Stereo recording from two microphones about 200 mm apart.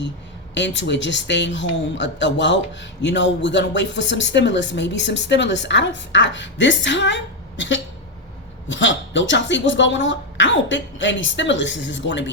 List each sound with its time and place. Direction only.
0.5 s speech: 65° left (ahead or behind)